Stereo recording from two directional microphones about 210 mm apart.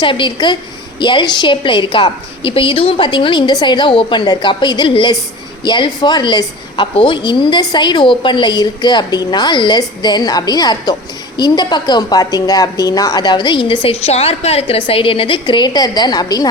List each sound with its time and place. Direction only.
0.0 s a woman's voice: 25° left (ahead or behind)